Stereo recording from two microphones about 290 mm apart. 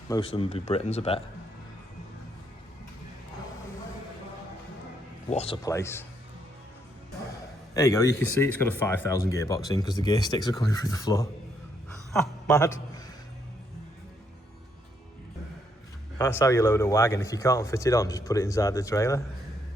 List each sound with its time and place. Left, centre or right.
0.1 s speech: centre
5.3 s speech: left
7.7 s a man's voice: centre
16.1 s speech: centre